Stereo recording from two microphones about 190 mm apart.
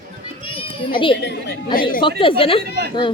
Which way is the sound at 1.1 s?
65° left (ahead or behind).